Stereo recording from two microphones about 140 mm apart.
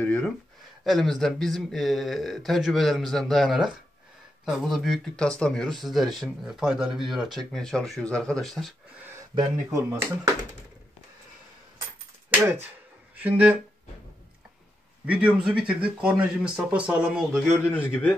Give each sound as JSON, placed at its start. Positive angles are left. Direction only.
{"t": 0.0, "sound": "a sound", "side_deg": 10}
{"t": 0.8, "sound": "speech", "side_deg": 0}
{"t": 9.3, "sound": "speech", "side_deg": -25}
{"t": 12.3, "sound": "speech", "side_deg": -15}
{"t": 15.0, "sound": "speech", "side_deg": -10}
{"t": 17.4, "sound": "a man's voice", "side_deg": 10}